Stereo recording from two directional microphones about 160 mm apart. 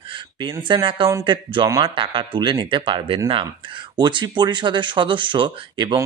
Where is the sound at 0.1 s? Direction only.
30° right (ahead or behind).